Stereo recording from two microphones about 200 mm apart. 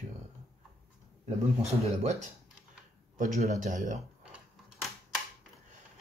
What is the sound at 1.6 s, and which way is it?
Speech, 35° right (ahead or behind).